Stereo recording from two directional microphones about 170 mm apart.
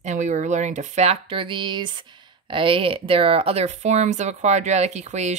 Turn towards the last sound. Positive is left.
turn(degrees=-40)  # may be behind; listen again after turning